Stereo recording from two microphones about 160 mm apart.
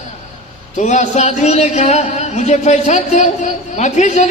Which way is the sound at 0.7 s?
50° left (ahead or behind).